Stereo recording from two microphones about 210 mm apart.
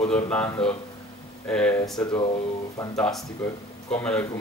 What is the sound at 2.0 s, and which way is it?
Speech, 25° left (ahead or behind).